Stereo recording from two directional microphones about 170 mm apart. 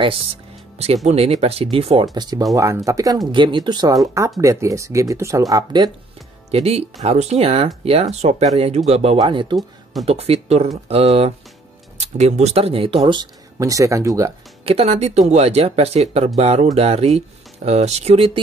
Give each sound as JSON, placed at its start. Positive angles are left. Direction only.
{"t": 1.0, "sound": "speech", "side_deg": -40}
{"t": 2.1, "sound": "speech", "side_deg": -25}
{"t": 6.5, "sound": "speech", "side_deg": -35}
{"t": 14.6, "sound": "speech", "side_deg": -35}